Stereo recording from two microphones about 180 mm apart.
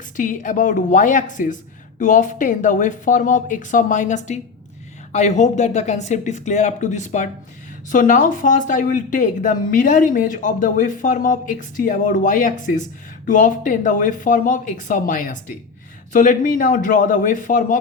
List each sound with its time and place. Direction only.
0.2 s speech: 45° left (ahead or behind)